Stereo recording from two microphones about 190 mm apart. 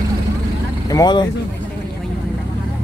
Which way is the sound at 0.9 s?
20° left (ahead or behind).